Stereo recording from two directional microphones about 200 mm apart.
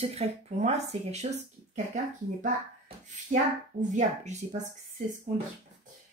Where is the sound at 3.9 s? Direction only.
35° right (ahead or behind).